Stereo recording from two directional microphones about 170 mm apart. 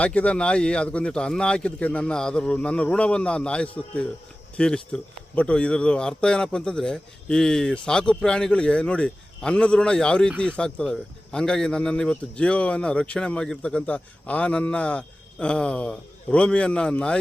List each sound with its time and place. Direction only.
0.0 s speech: 5° left (ahead or behind)